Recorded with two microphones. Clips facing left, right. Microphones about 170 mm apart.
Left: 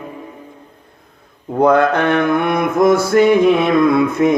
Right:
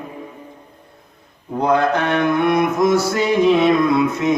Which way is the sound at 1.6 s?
55° left (ahead or behind).